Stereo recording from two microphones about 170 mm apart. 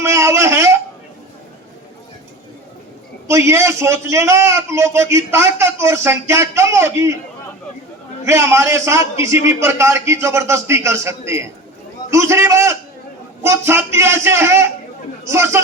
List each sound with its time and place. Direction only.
0.0 s a man's voice: 15° right (ahead or behind)
3.2 s a man's voice: 15° right (ahead or behind)
8.2 s a man's voice: 15° right (ahead or behind)